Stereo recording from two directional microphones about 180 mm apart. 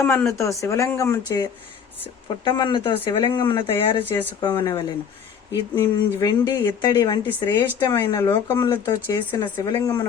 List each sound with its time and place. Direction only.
0.0 s speech: 15° left (ahead or behind)
2.4 s speech: 25° left (ahead or behind)